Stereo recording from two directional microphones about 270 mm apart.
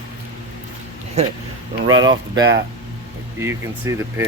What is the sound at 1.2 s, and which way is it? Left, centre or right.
Speech, right.